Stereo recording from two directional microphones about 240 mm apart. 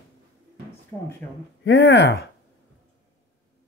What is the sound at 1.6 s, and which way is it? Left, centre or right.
Speech, left.